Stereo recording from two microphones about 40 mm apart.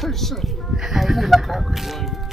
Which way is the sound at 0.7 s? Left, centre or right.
Centre.